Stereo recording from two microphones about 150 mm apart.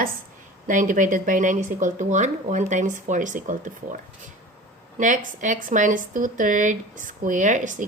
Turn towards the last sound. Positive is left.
turn(degrees=-60)  # may be behind; listen again after turning